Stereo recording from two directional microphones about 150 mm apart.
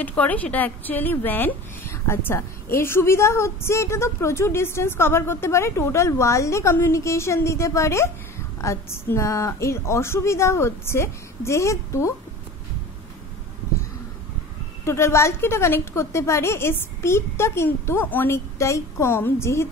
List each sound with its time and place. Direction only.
0.0 s speech: 10° left (ahead or behind)
14.9 s speech: 15° left (ahead or behind)